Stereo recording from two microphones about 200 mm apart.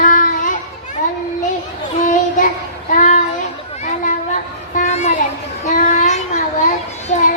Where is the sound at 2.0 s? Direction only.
40° left (ahead or behind).